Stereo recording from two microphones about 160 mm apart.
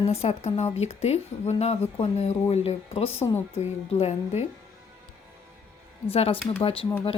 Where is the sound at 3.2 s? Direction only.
15° left (ahead or behind).